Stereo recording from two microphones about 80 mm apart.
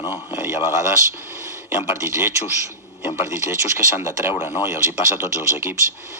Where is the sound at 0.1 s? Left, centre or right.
Right.